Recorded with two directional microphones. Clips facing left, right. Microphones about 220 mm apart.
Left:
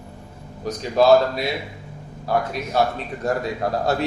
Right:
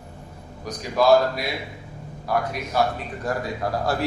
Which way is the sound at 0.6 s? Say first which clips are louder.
Left 3 dB; 25° left (ahead or behind).